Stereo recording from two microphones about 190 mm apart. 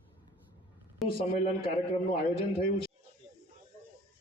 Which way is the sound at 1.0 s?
Centre (ahead or behind).